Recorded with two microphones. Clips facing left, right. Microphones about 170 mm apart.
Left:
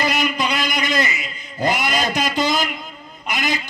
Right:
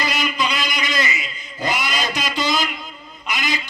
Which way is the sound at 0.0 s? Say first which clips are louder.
Left 2 dB; 55° left (ahead or behind).